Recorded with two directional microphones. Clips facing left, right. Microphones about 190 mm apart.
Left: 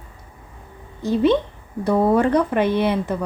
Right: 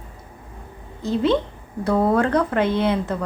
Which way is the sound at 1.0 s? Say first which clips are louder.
Left 2 dB; 15° left (ahead or behind).